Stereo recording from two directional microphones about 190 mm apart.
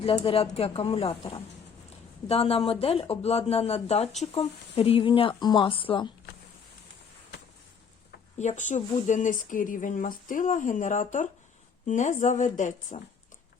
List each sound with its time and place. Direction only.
0.0 s speech: 30° left (ahead or behind)
2.2 s speech: 30° left (ahead or behind)
8.4 s speech: 40° left (ahead or behind)